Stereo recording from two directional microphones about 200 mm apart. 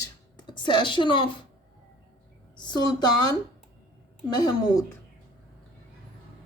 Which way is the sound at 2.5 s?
20° left (ahead or behind).